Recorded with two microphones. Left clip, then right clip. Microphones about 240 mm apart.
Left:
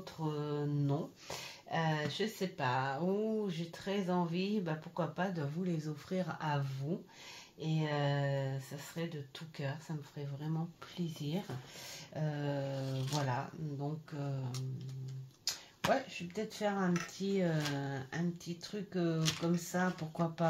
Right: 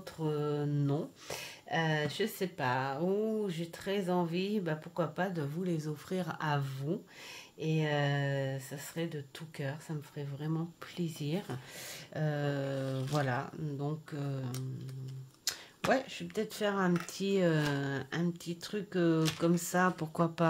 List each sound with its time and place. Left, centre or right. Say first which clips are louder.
0.2 s speech: right 4 dB; right
15.5 s a sound: right 2 dB; right
15.9 s speech: right 3 dB; right